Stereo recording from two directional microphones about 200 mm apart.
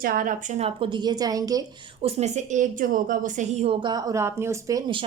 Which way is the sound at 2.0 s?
35° right (ahead or behind).